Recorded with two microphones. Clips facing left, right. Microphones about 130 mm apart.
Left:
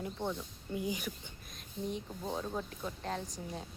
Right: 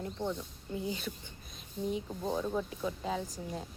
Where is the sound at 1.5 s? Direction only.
Centre (ahead or behind).